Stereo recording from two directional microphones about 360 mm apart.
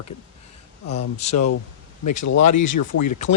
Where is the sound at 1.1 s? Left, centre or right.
Centre.